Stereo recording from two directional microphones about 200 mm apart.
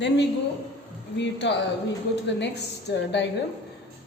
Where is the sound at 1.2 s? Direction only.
60° left (ahead or behind).